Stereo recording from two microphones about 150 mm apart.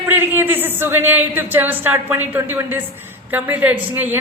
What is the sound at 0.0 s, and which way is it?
A woman's voice, 15° right (ahead or behind).